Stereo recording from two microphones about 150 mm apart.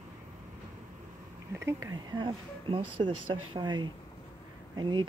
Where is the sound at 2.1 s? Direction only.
30° right (ahead or behind).